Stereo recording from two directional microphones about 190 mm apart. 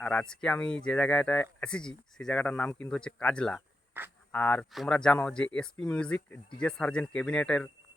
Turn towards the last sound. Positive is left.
turn(degrees=5)  # may be behind; listen again after turning